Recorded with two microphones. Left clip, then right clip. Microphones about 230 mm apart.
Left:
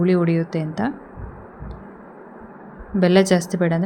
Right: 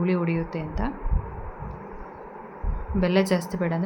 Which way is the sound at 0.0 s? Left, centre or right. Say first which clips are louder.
Left 7 dB; centre.